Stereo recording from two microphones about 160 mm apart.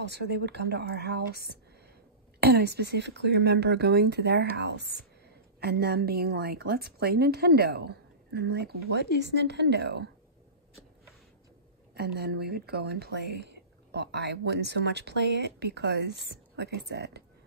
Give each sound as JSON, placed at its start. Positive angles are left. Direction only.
{"t": 0.0, "sound": "speech", "side_deg": -90}
{"t": 5.6, "sound": "a woman's voice", "side_deg": -75}
{"t": 11.9, "sound": "speech", "side_deg": -80}